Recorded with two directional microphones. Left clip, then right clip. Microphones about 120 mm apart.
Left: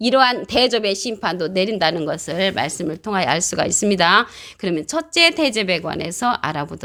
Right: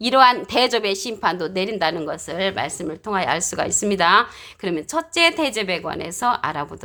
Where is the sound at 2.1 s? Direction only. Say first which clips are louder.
Left 3 dB; 55° left (ahead or behind).